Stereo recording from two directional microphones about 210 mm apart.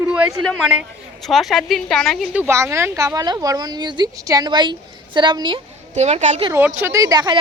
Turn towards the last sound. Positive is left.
turn(degrees=-20)  # may be behind; listen again after turning